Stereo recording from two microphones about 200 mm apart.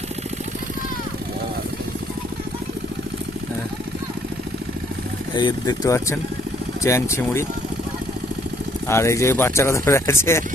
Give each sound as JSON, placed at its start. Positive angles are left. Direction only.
{"t": 5.4, "sound": "speech", "side_deg": 20}
{"t": 8.9, "sound": "speech", "side_deg": 15}